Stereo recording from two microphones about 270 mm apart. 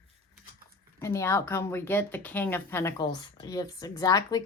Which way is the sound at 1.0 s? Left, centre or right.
Centre.